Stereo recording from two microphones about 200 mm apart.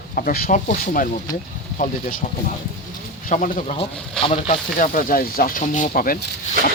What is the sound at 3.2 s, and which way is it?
Speech, 40° left (ahead or behind).